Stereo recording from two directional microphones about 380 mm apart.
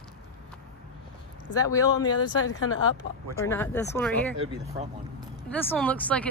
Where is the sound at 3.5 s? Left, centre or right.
Centre.